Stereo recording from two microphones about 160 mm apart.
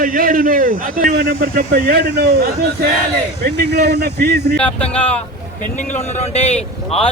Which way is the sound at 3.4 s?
85° right.